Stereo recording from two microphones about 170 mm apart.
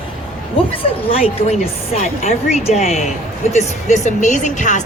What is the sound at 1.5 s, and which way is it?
A woman's voice, 40° left (ahead or behind).